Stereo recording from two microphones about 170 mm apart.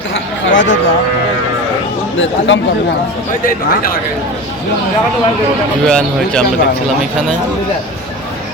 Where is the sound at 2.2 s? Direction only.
90° left.